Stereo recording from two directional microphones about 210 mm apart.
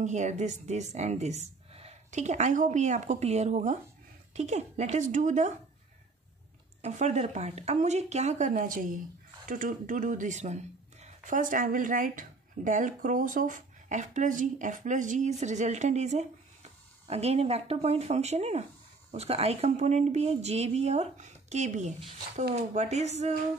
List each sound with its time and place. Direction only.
0.0 s speech: 35° right (ahead or behind)
6.8 s speech: 35° right (ahead or behind)